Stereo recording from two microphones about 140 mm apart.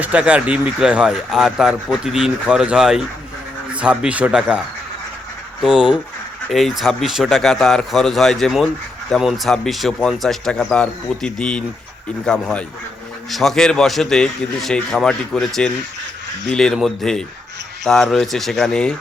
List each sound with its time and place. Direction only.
0.0 s a man's voice: 10° right (ahead or behind)
5.6 s a man's voice: 5° right (ahead or behind)